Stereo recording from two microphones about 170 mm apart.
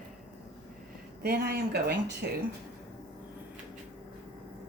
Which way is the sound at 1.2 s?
65° right (ahead or behind).